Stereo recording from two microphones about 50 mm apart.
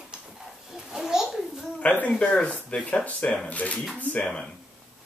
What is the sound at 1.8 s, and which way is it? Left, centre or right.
Speech, left.